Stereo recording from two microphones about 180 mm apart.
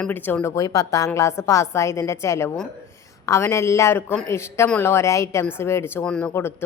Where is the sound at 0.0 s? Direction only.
10° left (ahead or behind).